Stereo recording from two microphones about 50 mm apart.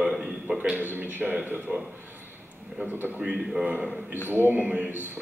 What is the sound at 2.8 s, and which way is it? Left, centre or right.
Speech, right.